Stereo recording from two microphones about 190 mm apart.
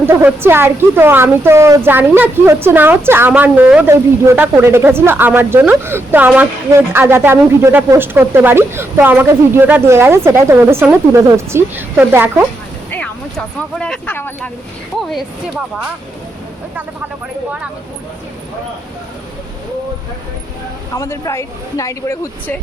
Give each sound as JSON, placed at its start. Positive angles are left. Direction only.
{"t": 0.0, "sound": "speech", "side_deg": -10}
{"t": 12.9, "sound": "speech", "side_deg": 5}
{"t": 20.9, "sound": "speech", "side_deg": 15}